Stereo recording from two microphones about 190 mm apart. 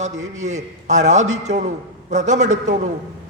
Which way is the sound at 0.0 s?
40° right (ahead or behind).